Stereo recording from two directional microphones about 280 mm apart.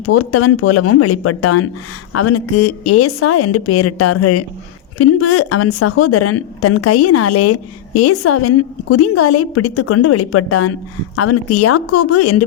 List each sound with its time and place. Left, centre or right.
0.0 s speech: left